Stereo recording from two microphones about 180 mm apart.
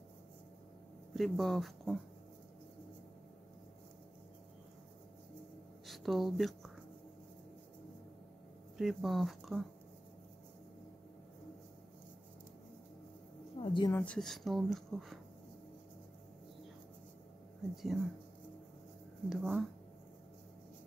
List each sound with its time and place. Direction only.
1.1 s speech: centre (ahead or behind)
5.9 s speech: centre (ahead or behind)
8.7 s speech: centre (ahead or behind)
13.6 s a sound: 25° left (ahead or behind)
13.9 s speech: 5° left (ahead or behind)
17.9 s speech: centre (ahead or behind)
19.2 s speech: centre (ahead or behind)